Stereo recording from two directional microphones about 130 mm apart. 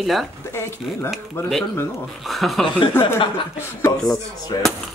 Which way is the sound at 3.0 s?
20° left (ahead or behind).